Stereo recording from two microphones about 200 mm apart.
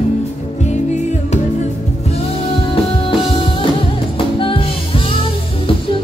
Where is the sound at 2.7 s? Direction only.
25° left (ahead or behind).